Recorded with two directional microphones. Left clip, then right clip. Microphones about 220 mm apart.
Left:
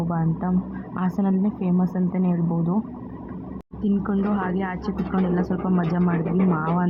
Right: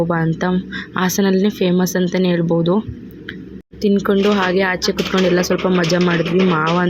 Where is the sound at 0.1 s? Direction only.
30° right (ahead or behind).